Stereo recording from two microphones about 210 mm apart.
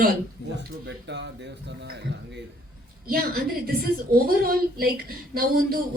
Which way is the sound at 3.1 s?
45° right (ahead or behind).